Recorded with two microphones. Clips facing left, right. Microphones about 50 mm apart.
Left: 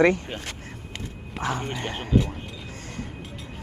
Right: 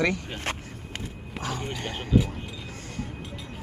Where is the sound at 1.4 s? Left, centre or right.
Left.